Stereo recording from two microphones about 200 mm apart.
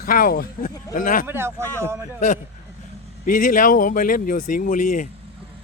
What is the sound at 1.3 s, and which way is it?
Speech, 10° right (ahead or behind).